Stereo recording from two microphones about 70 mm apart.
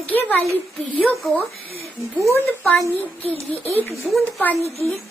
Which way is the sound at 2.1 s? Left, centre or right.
Right.